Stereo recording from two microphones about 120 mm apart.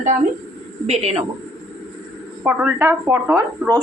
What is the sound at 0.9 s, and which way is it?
Speech, 60° right (ahead or behind).